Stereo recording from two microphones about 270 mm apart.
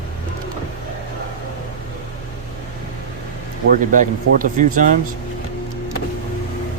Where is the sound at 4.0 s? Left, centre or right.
Right.